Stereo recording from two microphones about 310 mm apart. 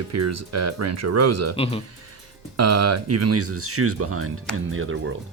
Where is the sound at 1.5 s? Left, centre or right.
Centre.